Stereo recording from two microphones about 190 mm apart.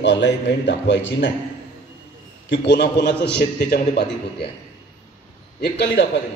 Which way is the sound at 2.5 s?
65° left (ahead or behind).